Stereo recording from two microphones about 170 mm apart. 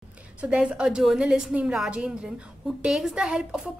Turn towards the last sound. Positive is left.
turn(degrees=-5)  # may be behind; listen again after turning